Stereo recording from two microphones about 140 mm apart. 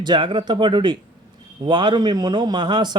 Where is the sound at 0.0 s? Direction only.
35° right (ahead or behind).